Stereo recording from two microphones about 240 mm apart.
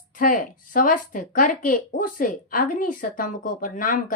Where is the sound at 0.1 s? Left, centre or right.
Left.